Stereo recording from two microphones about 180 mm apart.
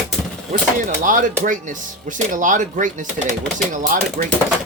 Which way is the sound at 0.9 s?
45° right (ahead or behind).